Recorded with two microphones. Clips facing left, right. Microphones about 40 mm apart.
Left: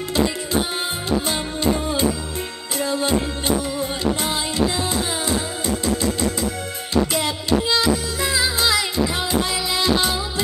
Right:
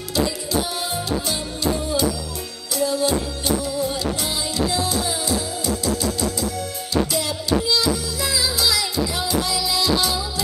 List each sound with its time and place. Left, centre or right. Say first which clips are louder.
0.1 s music: left 1 dB; left
6.9 s music: left 2 dB; left